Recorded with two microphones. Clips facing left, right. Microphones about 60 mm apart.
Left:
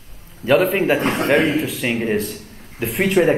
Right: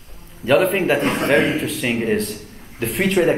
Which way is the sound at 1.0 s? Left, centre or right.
Left.